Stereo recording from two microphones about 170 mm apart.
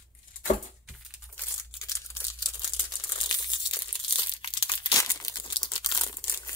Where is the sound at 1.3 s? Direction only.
20° left (ahead or behind).